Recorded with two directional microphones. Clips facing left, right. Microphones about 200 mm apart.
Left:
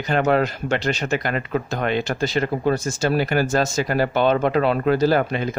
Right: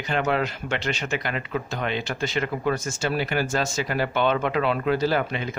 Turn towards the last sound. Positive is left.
turn(degrees=40)  # may be behind; listen again after turning